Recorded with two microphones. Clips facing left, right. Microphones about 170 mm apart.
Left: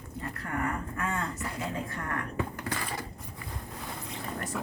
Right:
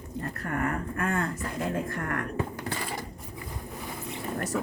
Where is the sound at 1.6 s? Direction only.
55° right (ahead or behind).